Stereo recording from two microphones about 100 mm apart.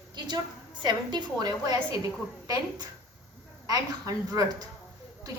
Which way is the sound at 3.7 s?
40° right (ahead or behind).